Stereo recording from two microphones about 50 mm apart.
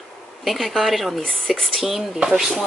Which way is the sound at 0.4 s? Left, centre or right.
Centre.